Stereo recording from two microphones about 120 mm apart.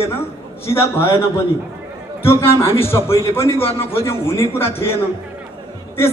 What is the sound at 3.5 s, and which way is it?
Speech, 55° left (ahead or behind).